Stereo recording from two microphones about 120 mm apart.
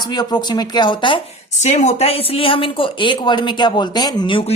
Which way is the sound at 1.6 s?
70° left (ahead or behind).